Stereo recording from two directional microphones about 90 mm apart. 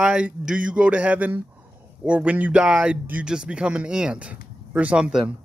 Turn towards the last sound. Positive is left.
turn(degrees=-10)  # may be behind; listen again after turning